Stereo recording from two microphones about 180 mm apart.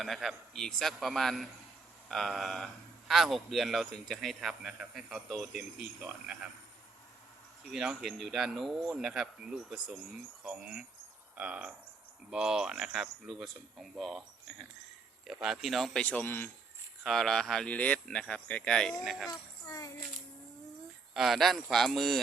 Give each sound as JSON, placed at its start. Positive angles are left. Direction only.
{"t": 0.0, "sound": "a man's voice", "side_deg": 0}
{"t": 7.6, "sound": "a man's voice", "side_deg": -5}
{"t": 15.3, "sound": "a man's voice", "side_deg": 0}
{"t": 19.3, "sound": "speech", "side_deg": 20}
{"t": 21.1, "sound": "a man's voice", "side_deg": 0}